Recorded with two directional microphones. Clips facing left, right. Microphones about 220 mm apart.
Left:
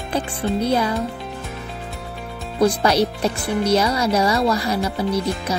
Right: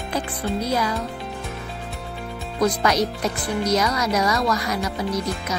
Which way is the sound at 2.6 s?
30° left (ahead or behind).